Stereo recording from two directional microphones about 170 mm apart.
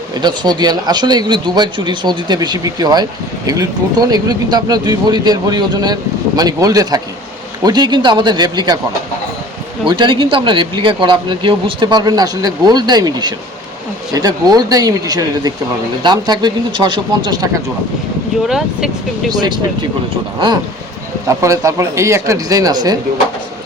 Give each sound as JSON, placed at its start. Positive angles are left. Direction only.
{"t": 0.2, "sound": "speech", "side_deg": -25}
{"t": 9.8, "sound": "speech", "side_deg": -30}
{"t": 18.4, "sound": "speech", "side_deg": -5}
{"t": 19.3, "sound": "speech", "side_deg": -25}
{"t": 21.2, "sound": "speech", "side_deg": -20}